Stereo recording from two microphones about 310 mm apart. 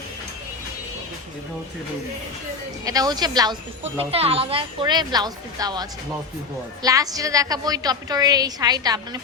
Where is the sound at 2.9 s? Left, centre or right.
Centre.